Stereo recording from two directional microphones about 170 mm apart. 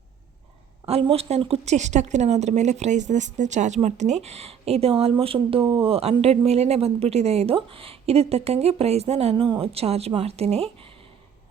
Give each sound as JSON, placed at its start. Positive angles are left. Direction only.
{"t": 0.9, "sound": "speech", "side_deg": -35}